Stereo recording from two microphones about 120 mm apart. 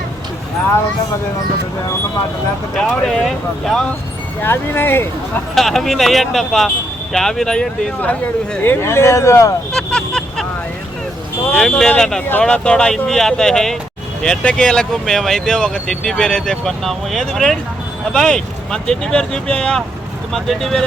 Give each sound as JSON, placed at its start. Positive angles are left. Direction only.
{"t": 2.7, "sound": "speech", "side_deg": 5}
{"t": 4.4, "sound": "speech", "side_deg": 20}
{"t": 5.5, "sound": "speech", "side_deg": 0}
{"t": 9.7, "sound": "vehicle", "side_deg": 5}
{"t": 11.5, "sound": "speech", "side_deg": 5}